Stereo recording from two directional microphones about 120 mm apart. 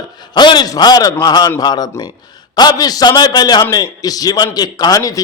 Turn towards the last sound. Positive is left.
turn(degrees=30)  # may be behind; listen again after turning